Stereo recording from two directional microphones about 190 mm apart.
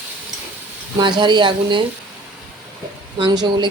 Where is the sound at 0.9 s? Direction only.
25° right (ahead or behind).